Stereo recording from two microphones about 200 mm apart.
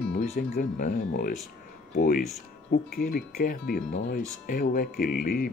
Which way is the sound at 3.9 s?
65° left (ahead or behind).